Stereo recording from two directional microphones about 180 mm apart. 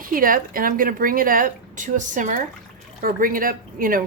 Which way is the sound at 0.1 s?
50° right (ahead or behind).